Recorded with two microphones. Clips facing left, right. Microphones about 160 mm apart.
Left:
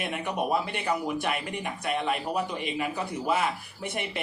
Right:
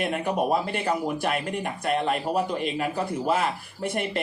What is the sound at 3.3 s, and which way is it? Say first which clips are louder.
Speech: left 1 dB; 50° right (ahead or behind).